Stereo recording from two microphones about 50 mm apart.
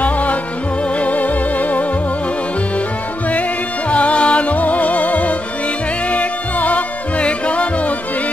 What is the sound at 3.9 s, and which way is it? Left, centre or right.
Music, left.